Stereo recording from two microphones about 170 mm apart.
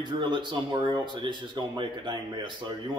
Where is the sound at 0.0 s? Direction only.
25° right (ahead or behind).